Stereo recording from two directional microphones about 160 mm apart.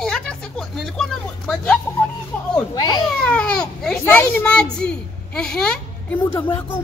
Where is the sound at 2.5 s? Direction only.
25° left (ahead or behind).